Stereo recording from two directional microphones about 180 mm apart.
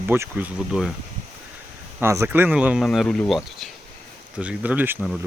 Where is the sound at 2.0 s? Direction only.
15° right (ahead or behind).